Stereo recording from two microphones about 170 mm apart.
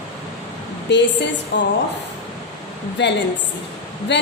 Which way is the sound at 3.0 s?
90° left.